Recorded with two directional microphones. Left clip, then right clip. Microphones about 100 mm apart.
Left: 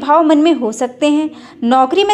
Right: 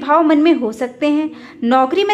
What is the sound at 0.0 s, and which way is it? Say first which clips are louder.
A woman's voice: left 2 dB; 25° left (ahead or behind).